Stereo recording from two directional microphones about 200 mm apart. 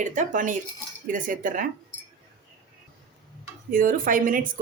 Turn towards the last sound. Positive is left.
turn(degrees=-45)  # may be behind; listen again after turning